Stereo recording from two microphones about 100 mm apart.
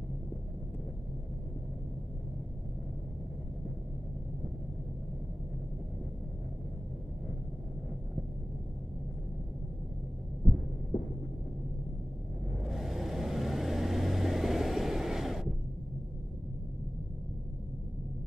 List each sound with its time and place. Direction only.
12.5 s vehicle: centre (ahead or behind)